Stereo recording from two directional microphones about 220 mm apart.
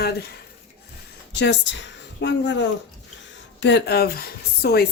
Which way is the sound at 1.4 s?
55° left (ahead or behind).